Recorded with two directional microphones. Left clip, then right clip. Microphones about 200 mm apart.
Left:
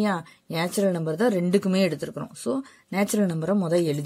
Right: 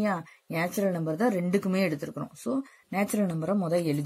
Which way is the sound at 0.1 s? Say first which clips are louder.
Left 3 dB; 45° left (ahead or behind).